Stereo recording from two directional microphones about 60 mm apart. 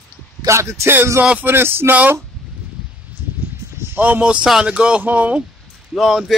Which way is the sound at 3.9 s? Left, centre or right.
Right.